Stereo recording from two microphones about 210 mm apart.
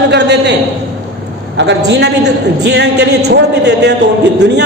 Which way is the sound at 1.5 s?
60° right (ahead or behind).